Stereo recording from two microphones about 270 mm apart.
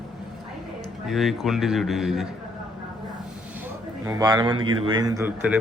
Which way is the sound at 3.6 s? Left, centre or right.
Centre.